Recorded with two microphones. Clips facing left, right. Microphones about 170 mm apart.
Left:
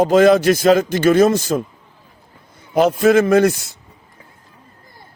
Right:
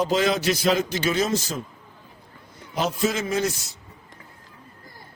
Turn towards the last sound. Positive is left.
turn(degrees=60)  # may be behind; listen again after turning